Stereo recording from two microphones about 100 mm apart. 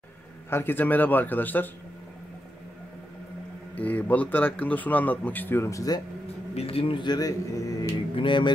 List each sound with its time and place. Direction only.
0.5 s a man's voice: 20° left (ahead or behind)
3.7 s speech: 15° left (ahead or behind); by 5.9 s 35° left (ahead or behind)
6.5 s speech: 75° left (ahead or behind); by 7.9 s 35° left (ahead or behind)
8.2 s speech: 55° left (ahead or behind)